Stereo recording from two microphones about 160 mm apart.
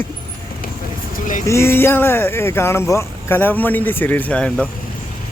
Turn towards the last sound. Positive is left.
turn(degrees=5)  # may be behind; listen again after turning